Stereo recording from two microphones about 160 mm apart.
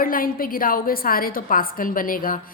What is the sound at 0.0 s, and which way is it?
A woman's voice, 65° left (ahead or behind).